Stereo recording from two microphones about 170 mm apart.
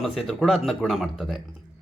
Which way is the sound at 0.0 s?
Centre (ahead or behind).